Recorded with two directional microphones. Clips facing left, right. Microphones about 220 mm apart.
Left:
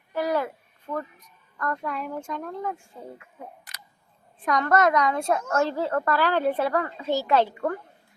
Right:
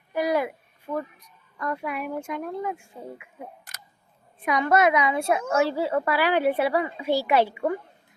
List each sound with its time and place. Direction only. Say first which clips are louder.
0.1 s a sound: right 1 dB; 15° right (ahead or behind)
1.5 s a woman's voice: even; 10° right (ahead or behind)
3.6 s camera: right 1 dB; 45° right (ahead or behind)
4.4 s a woman's voice: right 1 dB; 10° right (ahead or behind)